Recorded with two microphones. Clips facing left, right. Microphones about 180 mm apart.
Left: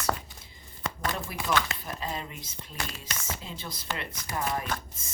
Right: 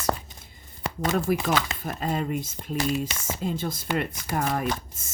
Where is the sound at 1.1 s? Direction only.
45° right (ahead or behind).